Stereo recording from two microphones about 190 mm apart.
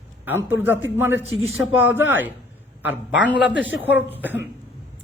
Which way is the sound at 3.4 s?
75° left (ahead or behind).